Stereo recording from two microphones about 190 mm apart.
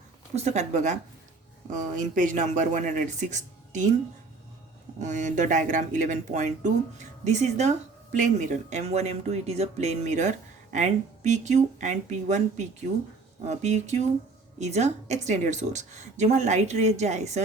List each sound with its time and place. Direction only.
0.3 s speech: 35° right (ahead or behind)
4.9 s speech: 40° right (ahead or behind)